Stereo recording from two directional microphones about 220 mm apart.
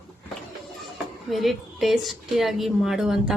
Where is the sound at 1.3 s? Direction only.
Centre (ahead or behind).